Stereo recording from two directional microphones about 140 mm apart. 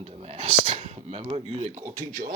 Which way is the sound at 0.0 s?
45° right (ahead or behind).